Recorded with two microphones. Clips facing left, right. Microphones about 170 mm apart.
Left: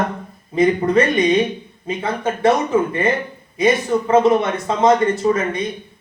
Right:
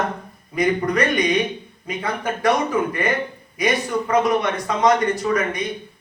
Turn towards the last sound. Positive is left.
turn(degrees=25)  # may be behind; listen again after turning